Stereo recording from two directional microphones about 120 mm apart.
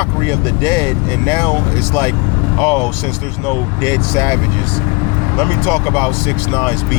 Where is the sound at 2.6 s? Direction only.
25° left (ahead or behind).